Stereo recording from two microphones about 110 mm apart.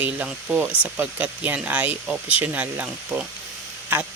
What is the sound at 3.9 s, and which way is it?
Speech, 20° right (ahead or behind).